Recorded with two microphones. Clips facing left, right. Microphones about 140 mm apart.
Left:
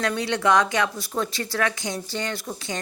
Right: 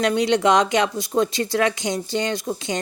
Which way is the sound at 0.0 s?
20° right (ahead or behind).